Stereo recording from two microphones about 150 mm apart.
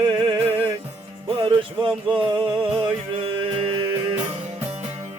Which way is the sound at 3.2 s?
35° right (ahead or behind).